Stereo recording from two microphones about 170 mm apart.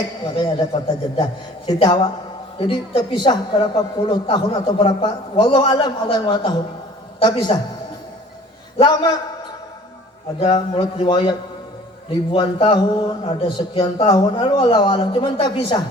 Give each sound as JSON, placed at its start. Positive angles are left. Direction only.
{"t": 0.3, "sound": "a woman's voice", "side_deg": 25}
{"t": 8.8, "sound": "a woman's voice", "side_deg": 25}
{"t": 10.4, "sound": "a woman's voice", "side_deg": 30}